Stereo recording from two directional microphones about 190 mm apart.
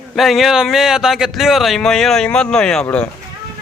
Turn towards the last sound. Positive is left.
turn(degrees=5)  # may be behind; listen again after turning